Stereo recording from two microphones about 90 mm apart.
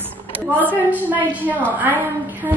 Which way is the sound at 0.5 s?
20° right (ahead or behind).